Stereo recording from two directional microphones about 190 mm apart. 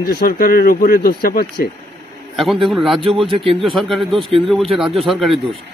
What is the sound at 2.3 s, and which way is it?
Speech, centre (ahead or behind).